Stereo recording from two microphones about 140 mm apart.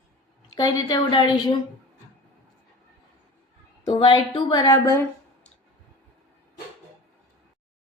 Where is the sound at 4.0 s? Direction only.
30° left (ahead or behind).